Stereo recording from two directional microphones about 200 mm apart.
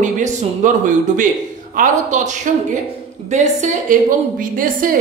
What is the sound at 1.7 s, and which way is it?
A woman's voice, 40° right (ahead or behind).